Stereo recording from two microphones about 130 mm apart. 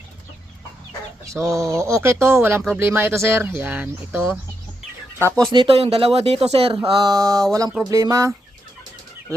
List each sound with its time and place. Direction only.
1.3 s speech: 25° right (ahead or behind)
5.5 s speech: 45° right (ahead or behind)
6.7 s speech: 35° right (ahead or behind)